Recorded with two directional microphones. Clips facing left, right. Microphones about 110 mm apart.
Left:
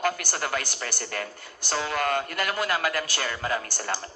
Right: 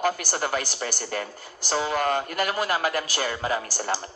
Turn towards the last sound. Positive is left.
turn(degrees=-15)  # may be behind; listen again after turning